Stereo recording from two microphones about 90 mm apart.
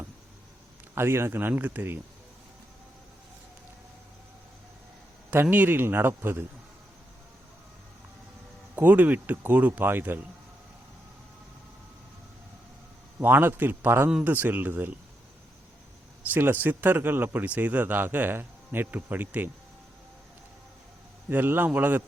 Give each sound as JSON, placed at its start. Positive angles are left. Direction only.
{"t": 0.9, "sound": "speech", "side_deg": -25}
{"t": 5.3, "sound": "speech", "side_deg": -20}
{"t": 8.7, "sound": "speech", "side_deg": -20}
{"t": 13.1, "sound": "speech", "side_deg": -25}
{"t": 16.3, "sound": "speech", "side_deg": -20}
{"t": 21.2, "sound": "speech", "side_deg": -20}